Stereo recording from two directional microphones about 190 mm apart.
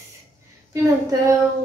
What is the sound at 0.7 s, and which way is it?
Speech, 15° right (ahead or behind).